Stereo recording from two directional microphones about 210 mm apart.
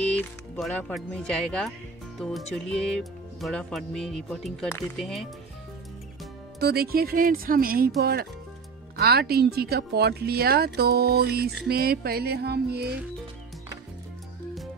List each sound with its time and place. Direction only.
0.0 s speech: 5° left (ahead or behind)
4.9 s speech: centre (ahead or behind)
6.6 s speech: 50° right (ahead or behind)